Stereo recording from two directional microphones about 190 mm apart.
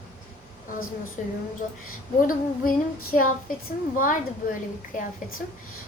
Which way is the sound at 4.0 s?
45° left (ahead or behind).